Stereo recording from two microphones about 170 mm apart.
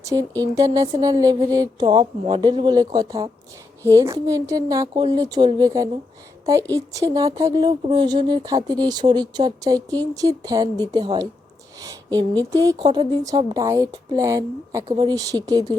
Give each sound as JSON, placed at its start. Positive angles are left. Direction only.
{"t": 0.0, "sound": "a woman's voice", "side_deg": -20}
{"t": 14.8, "sound": "a woman's voice", "side_deg": -30}